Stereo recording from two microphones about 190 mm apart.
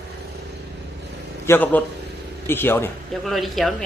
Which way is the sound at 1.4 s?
10° left (ahead or behind).